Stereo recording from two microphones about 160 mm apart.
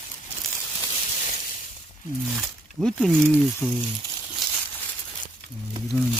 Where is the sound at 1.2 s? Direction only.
55° left (ahead or behind).